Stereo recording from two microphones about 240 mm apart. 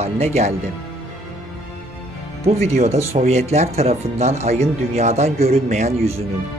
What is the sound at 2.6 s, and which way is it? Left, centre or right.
Speech, right.